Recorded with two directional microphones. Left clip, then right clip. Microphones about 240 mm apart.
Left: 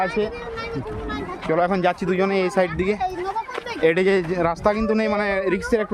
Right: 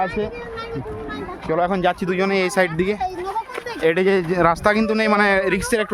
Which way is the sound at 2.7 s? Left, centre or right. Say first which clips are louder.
Right 1 dB; centre.